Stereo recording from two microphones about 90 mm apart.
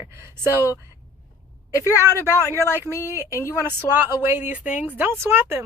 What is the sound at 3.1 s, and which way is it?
A woman's voice, 30° right (ahead or behind).